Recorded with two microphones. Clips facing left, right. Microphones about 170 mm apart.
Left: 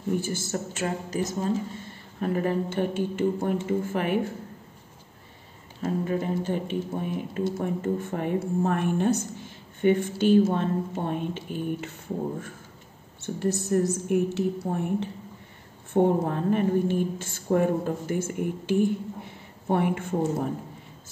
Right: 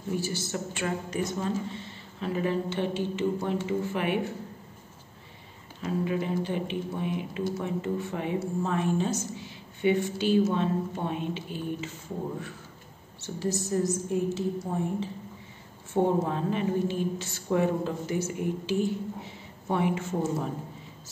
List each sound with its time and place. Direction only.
0.1 s a woman's voice: 50° left (ahead or behind)
5.8 s a woman's voice: 45° left (ahead or behind)
13.2 s a woman's voice: 60° left (ahead or behind)
15.9 s a woman's voice: 55° left (ahead or behind)